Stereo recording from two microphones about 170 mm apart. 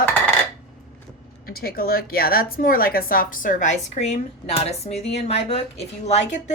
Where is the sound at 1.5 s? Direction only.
60° left (ahead or behind).